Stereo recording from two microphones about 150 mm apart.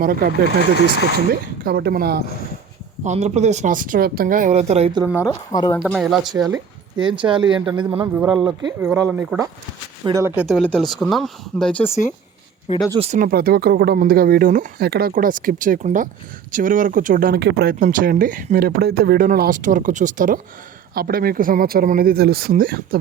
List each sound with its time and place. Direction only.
0.0 s speech: 75° right (ahead or behind); by 2.2 s 90° right
3.0 s speech: 50° right (ahead or behind)
5.1 s speech: 20° left (ahead or behind)
5.8 s speech: 5° right (ahead or behind)
6.3 s speech: 25° right (ahead or behind)
8.8 s speech: 15° right (ahead or behind)
10.4 s speech: 5° left (ahead or behind)
13.0 s speech: 50° right (ahead or behind)
13.2 s speech: 85° right
17.8 s speech: 65° right (ahead or behind)
20.9 s speech: 80° right